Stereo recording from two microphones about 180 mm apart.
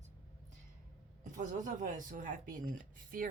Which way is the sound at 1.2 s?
45° right (ahead or behind).